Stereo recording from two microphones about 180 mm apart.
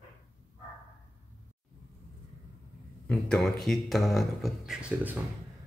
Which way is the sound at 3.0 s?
5° left (ahead or behind).